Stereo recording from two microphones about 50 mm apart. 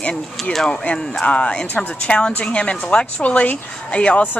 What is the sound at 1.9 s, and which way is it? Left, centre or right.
A woman's voice, left.